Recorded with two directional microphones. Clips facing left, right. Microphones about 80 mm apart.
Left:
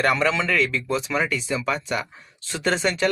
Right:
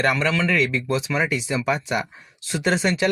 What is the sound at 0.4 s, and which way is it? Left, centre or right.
Speech, centre.